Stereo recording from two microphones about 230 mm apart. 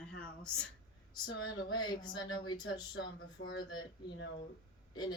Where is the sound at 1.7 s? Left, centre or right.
Centre.